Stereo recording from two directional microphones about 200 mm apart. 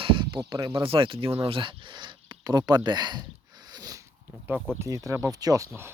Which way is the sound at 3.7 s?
20° right (ahead or behind).